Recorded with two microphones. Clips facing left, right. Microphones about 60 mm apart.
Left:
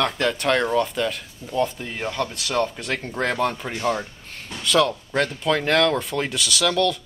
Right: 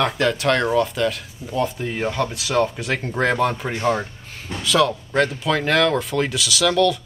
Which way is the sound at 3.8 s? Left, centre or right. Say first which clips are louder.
Right 3 dB; centre.